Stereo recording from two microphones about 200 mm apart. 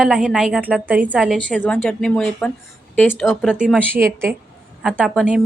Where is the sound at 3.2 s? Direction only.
Centre (ahead or behind).